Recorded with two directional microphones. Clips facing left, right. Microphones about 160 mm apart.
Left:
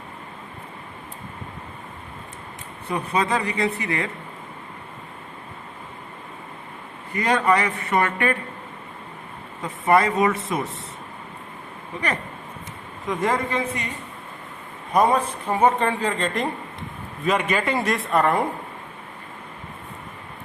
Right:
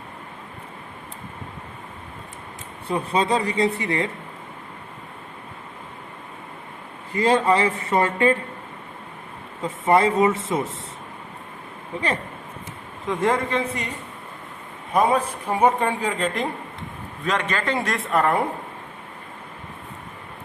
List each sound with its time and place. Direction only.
2.8 s speech: 30° right (ahead or behind)
7.1 s speech: 30° right (ahead or behind)
9.6 s speech: 25° right (ahead or behind)
13.1 s speech: 25° right (ahead or behind)
14.9 s speech: 10° right (ahead or behind)
17.2 s a man's voice: 10° left (ahead or behind)